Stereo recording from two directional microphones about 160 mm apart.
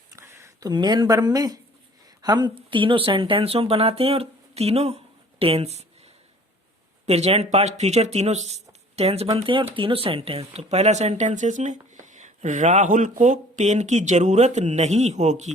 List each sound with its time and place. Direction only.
0.1 s speech: 20° right (ahead or behind); by 5.8 s 40° right (ahead or behind)
7.0 s speech: 40° right (ahead or behind)